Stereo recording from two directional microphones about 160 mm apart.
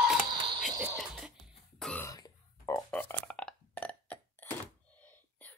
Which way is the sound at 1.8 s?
5° left (ahead or behind).